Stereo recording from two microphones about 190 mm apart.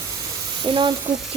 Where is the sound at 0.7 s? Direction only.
25° right (ahead or behind).